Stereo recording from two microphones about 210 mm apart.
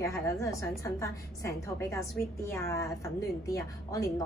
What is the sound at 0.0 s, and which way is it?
A woman's voice, 15° left (ahead or behind).